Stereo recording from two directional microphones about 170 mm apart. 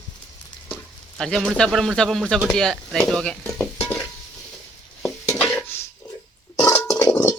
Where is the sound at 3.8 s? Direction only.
10° left (ahead or behind).